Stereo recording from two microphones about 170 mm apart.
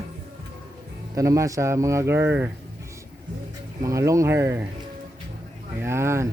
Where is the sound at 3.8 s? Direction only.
20° right (ahead or behind).